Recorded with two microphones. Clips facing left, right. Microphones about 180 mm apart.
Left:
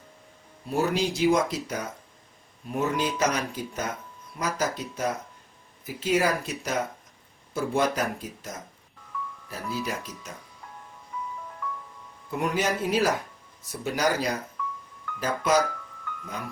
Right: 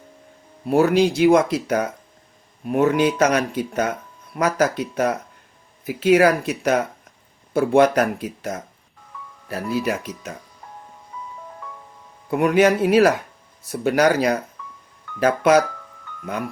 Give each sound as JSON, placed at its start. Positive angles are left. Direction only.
{"t": 0.6, "sound": "speech", "side_deg": -65}
{"t": 12.3, "sound": "speech", "side_deg": -65}